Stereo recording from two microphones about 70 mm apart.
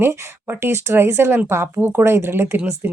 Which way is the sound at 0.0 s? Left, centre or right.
Right.